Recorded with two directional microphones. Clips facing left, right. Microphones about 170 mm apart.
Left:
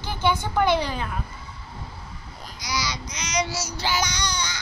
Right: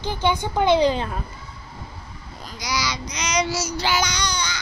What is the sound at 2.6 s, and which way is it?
Child singing, 90° right.